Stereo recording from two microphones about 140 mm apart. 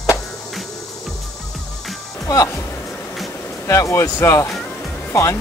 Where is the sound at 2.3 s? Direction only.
25° left (ahead or behind).